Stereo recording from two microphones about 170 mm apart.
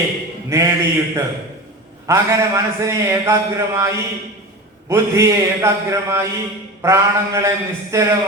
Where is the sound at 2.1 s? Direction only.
15° right (ahead or behind).